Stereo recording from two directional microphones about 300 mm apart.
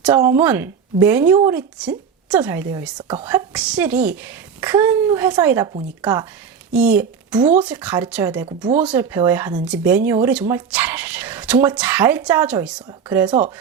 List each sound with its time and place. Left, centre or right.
0.0 s speech: centre
3.0 s speech: centre
3.2 s speech: centre